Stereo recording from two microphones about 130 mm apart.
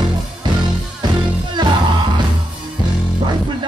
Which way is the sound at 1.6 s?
35° right (ahead or behind).